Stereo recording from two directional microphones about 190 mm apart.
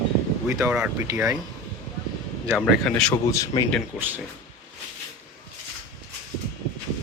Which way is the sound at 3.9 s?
10° right (ahead or behind).